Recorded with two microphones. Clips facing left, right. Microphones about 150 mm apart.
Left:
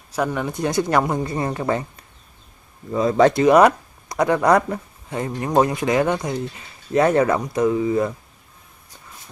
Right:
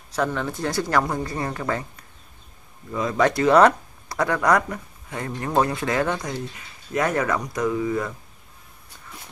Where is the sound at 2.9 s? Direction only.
30° left (ahead or behind).